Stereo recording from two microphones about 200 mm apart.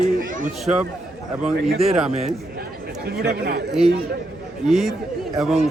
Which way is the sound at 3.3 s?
50° right (ahead or behind).